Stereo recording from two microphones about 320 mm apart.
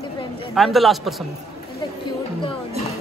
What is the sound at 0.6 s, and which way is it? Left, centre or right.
Speech, centre.